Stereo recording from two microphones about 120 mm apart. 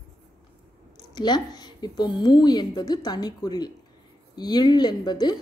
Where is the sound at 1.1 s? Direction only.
35° left (ahead or behind).